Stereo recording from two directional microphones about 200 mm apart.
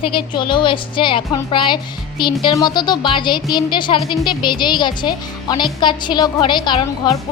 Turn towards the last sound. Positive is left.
turn(degrees=20)  # may be behind; listen again after turning